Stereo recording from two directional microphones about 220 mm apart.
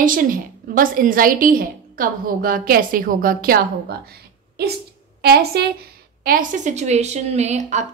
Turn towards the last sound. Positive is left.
turn(degrees=-30)  # may be behind; listen again after turning